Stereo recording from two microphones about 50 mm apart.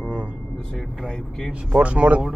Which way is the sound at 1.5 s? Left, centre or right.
Right.